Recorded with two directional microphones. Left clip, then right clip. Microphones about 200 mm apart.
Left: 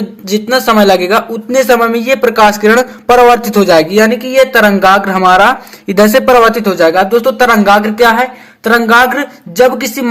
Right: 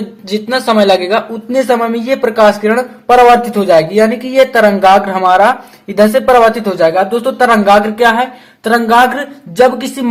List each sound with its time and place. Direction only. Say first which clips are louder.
0.3 s speech: left 3 dB; 25° left (ahead or behind)
6.5 s speech: left 2 dB; 20° left (ahead or behind)